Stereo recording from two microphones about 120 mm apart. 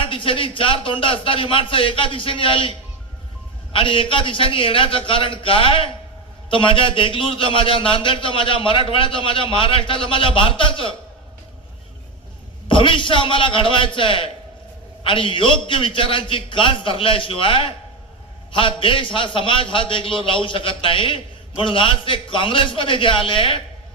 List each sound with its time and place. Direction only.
0.0 s a man's voice: 45° left (ahead or behind)
12.6 s a man's voice: 45° left (ahead or behind)